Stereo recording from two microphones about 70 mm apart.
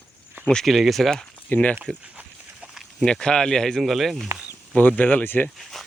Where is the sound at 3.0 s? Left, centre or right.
Centre.